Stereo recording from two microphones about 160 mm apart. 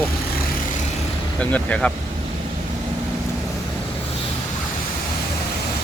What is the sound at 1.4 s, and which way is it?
Speech, 5° left (ahead or behind).